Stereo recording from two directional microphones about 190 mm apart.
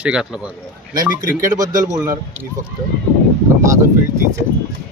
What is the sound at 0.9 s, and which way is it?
Speech, 20° right (ahead or behind).